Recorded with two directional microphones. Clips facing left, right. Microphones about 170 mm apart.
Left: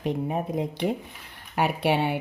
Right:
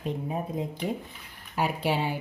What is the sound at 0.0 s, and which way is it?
Speech, 65° left (ahead or behind).